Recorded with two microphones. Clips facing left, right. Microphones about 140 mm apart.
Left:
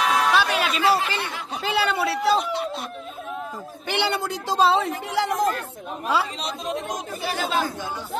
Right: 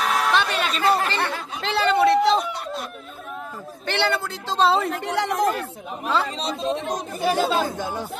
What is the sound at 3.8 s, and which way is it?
Speech, 10° left (ahead or behind).